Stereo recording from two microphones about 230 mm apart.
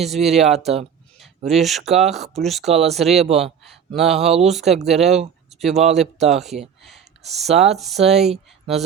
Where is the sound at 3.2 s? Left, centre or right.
Right.